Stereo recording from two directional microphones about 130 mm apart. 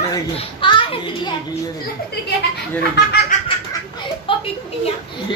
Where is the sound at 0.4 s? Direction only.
40° left (ahead or behind).